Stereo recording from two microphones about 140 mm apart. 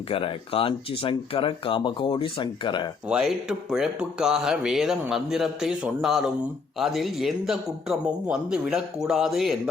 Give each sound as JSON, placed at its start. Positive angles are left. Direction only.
{"t": 0.1, "sound": "speech", "side_deg": 40}
{"t": 3.1, "sound": "speech", "side_deg": -5}